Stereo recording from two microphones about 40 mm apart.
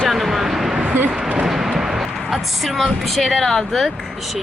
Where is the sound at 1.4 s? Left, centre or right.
Centre.